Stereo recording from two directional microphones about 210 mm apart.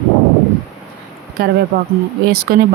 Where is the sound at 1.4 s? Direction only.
45° right (ahead or behind).